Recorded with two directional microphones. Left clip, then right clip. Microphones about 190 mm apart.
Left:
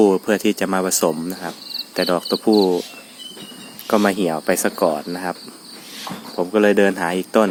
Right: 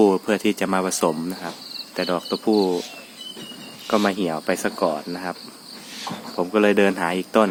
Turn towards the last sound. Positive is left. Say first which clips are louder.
# left 2 dB
turn(degrees=20)  # may be behind; listen again after turning